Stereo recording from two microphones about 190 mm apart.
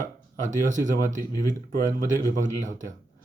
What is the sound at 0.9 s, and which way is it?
Speech, 45° right (ahead or behind).